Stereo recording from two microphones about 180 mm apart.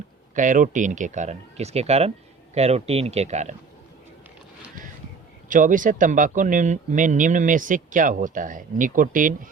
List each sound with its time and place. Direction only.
0.3 s speech: 45° right (ahead or behind)
5.5 s speech: 50° right (ahead or behind)